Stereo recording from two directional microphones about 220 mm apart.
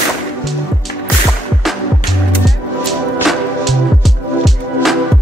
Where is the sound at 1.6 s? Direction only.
Centre (ahead or behind).